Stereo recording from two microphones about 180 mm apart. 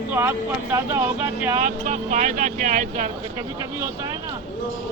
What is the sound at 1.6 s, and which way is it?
Speech, 40° right (ahead or behind).